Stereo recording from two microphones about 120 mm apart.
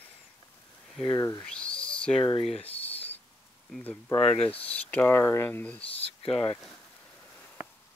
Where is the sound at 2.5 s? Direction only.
50° left (ahead or behind).